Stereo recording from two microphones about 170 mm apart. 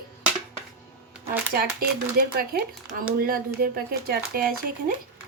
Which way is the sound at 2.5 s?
60° right (ahead or behind).